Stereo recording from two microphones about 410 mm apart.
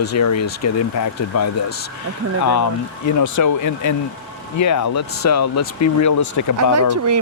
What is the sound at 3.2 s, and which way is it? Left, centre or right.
Speech, left.